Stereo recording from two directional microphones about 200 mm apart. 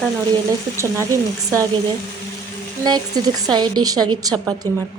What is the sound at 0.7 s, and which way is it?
Speech, 15° right (ahead or behind).